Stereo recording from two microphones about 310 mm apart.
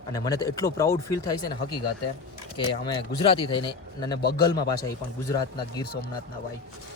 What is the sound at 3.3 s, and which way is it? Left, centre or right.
Speech, centre.